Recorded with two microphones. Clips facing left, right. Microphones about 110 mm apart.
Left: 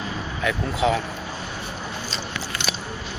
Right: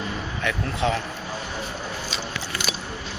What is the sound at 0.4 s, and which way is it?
Speech, 5° left (ahead or behind).